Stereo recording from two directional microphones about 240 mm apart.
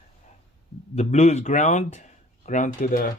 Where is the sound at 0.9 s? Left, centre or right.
Left.